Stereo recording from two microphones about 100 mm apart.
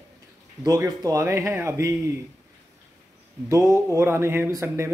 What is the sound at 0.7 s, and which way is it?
Speech, 35° right (ahead or behind).